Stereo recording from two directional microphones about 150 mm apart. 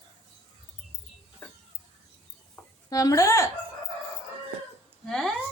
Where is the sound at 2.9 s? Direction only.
20° left (ahead or behind).